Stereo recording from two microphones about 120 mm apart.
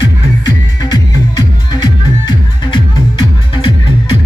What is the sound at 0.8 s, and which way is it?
Music, 35° left (ahead or behind).